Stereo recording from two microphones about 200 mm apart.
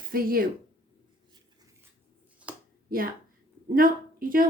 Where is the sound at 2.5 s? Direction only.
5° right (ahead or behind).